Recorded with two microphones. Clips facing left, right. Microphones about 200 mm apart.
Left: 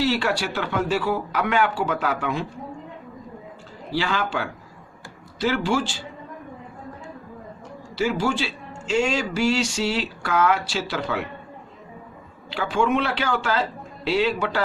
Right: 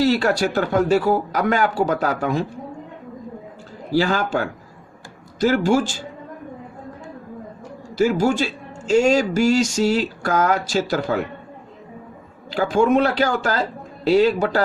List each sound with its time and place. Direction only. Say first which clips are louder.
0.0 s a man's voice: right 5 dB; 40° right (ahead or behind)
3.9 s a man's voice: right 6 dB; 45° right (ahead or behind)
7.9 s a man's voice: right 5 dB; 45° right (ahead or behind)
12.5 s a man's voice: right 5 dB; 40° right (ahead or behind)